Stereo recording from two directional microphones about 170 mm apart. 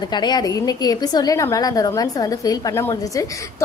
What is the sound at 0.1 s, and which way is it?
A woman's voice, 25° left (ahead or behind).